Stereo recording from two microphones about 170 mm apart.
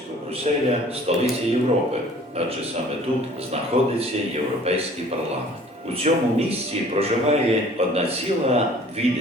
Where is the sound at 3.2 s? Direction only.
35° right (ahead or behind).